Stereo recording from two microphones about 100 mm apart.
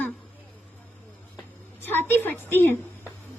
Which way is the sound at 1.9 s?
20° left (ahead or behind).